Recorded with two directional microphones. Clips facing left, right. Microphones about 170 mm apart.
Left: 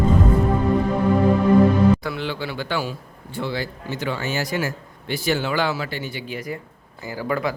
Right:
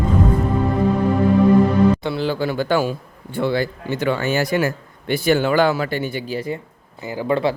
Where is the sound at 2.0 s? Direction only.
35° right (ahead or behind); by 6.2 s 50° right (ahead or behind).